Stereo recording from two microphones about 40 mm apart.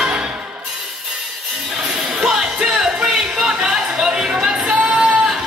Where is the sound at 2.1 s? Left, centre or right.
Centre.